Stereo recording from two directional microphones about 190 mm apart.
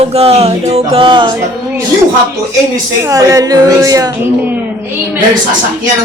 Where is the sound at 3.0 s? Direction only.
20° right (ahead or behind).